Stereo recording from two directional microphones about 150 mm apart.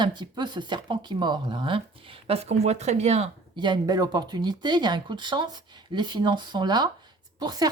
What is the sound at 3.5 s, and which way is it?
A woman's voice, 30° right (ahead or behind).